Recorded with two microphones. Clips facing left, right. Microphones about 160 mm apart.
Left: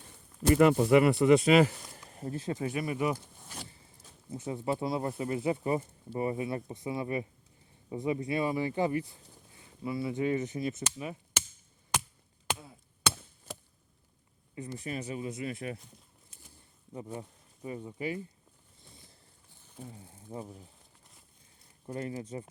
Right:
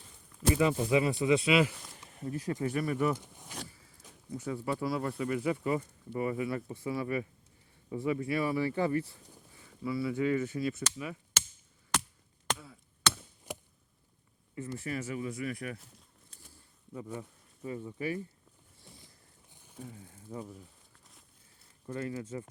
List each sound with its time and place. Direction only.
0.5 s speech: 65° left (ahead or behind)
1.4 s speech: 45° left (ahead or behind)
2.4 s speech: 20° left (ahead or behind)
3.2 s a sound: 15° right (ahead or behind)
4.3 s speech: 25° left (ahead or behind)
12.5 s chop: 25° left (ahead or behind)
13.5 s chop: 15° right (ahead or behind)
14.5 s speech: 20° left (ahead or behind)
15.8 s a sound: centre (ahead or behind)
16.9 s speech: 25° left (ahead or behind)
18.9 s a sound: 20° right (ahead or behind)
19.9 s speech: 20° left (ahead or behind)
21.8 s speech: 20° left (ahead or behind)